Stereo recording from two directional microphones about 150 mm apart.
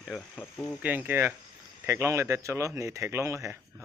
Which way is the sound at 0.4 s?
15° left (ahead or behind).